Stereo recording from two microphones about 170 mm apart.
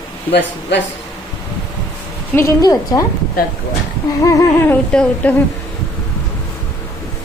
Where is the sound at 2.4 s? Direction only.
20° left (ahead or behind).